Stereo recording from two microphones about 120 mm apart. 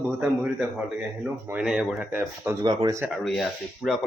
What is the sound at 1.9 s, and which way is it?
Speech, 15° right (ahead or behind).